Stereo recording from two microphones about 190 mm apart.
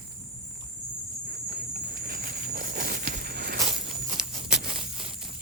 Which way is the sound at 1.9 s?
50° right (ahead or behind).